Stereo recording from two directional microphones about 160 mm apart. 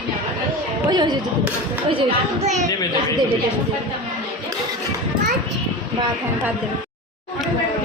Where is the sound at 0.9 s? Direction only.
25° right (ahead or behind).